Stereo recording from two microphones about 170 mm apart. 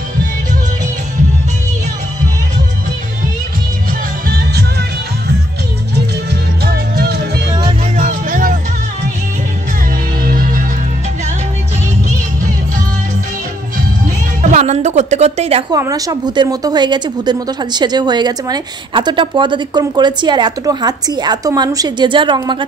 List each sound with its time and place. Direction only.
4.3 s music: 70° right (ahead or behind)
6.6 s music: 65° right (ahead or behind)
7.6 s music: 50° right (ahead or behind)
10.2 s music: 55° right (ahead or behind)
14.4 s music: 45° right (ahead or behind)
15.7 s a woman's voice: 20° right (ahead or behind)